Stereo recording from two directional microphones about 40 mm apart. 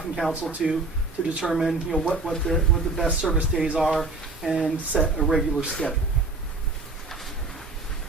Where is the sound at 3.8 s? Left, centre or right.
Centre.